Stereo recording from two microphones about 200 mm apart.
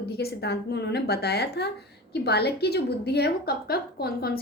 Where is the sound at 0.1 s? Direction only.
50° left (ahead or behind).